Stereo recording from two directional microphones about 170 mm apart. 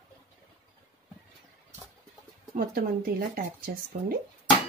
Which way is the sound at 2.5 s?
60° right (ahead or behind).